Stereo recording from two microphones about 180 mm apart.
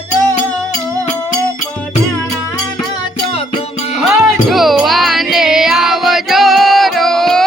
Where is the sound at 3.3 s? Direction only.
30° left (ahead or behind).